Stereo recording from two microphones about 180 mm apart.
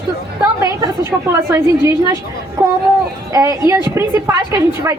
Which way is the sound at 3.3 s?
15° right (ahead or behind).